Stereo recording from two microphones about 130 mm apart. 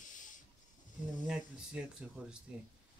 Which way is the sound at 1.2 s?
5° right (ahead or behind).